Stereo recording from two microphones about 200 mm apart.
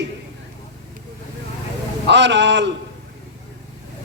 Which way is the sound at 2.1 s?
60° right (ahead or behind).